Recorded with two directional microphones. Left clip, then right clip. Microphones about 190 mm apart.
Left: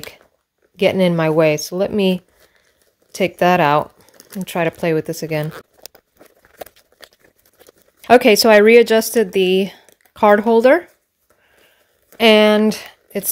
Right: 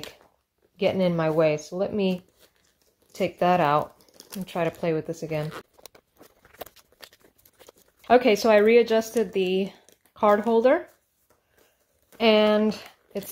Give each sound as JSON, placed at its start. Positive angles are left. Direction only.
{"t": 0.7, "sound": "speech", "side_deg": 50}
{"t": 5.5, "sound": "a sound", "side_deg": 15}
{"t": 8.0, "sound": "speech", "side_deg": 45}
{"t": 12.2, "sound": "speech", "side_deg": 45}